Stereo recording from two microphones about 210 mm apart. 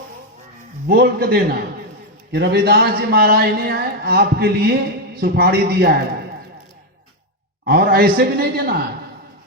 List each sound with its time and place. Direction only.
0.9 s speech: 50° right (ahead or behind)
7.6 s speech: 45° right (ahead or behind)